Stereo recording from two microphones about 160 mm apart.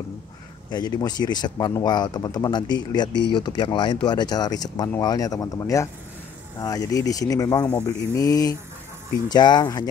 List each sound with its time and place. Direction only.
0.7 s speech: 25° left (ahead or behind)